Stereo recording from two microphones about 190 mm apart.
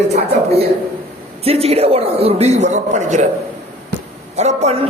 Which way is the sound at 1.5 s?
30° right (ahead or behind).